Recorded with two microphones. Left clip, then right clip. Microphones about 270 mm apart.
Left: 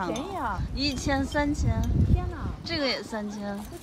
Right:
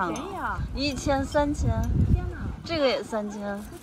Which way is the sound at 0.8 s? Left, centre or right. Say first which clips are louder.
Right 2 dB; centre.